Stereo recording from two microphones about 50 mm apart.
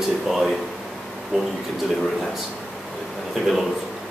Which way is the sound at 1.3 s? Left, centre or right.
Centre.